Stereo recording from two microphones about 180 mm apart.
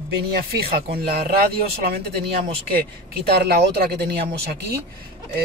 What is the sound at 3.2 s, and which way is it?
Speech, 60° right (ahead or behind).